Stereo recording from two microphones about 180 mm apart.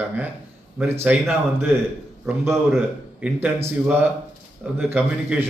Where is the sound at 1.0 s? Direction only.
10° right (ahead or behind).